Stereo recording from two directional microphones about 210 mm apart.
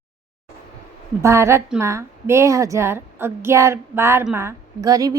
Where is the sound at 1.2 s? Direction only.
15° right (ahead or behind).